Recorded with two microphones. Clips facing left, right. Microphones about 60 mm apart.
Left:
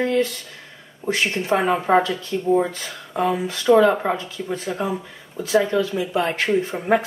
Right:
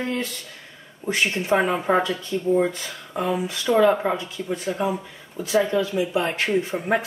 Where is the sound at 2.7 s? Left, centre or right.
Left.